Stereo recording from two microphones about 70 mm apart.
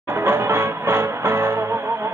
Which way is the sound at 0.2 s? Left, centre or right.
Right.